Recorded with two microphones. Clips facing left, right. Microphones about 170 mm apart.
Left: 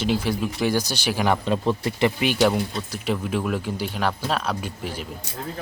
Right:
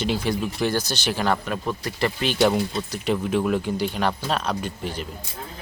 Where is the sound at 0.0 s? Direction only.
5° left (ahead or behind).